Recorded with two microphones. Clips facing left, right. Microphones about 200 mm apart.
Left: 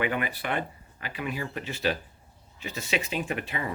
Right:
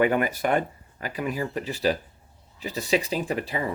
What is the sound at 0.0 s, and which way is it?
Speech, 45° right (ahead or behind).